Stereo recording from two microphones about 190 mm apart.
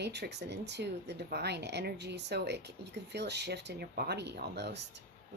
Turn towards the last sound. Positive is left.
turn(degrees=-65)  # may be behind; listen again after turning